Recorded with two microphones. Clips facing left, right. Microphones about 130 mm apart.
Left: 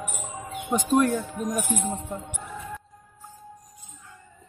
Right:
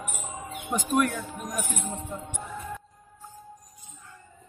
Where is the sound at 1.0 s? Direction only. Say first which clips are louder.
Left 4 dB; 35° left (ahead or behind).